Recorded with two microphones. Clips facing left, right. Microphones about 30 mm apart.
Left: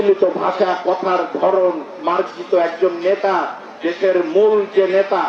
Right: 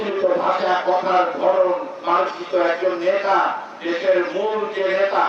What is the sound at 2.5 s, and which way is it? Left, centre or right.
A man's voice, centre.